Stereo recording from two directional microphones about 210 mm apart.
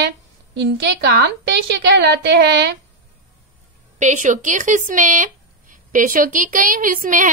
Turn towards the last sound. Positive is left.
turn(degrees=-40)  # may be behind; listen again after turning